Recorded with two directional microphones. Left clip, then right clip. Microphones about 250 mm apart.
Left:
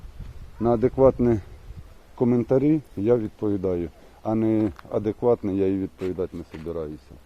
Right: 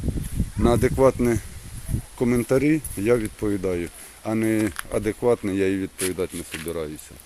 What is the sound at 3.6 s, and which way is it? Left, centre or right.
Speech, centre.